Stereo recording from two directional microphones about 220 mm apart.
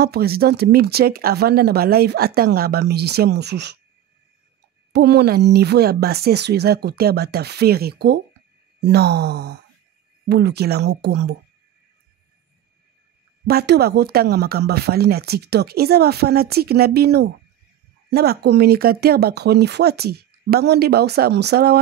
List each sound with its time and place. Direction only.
0.0 s speech: 45° right (ahead or behind)
4.9 s speech: 50° right (ahead or behind)
13.5 s speech: 45° right (ahead or behind)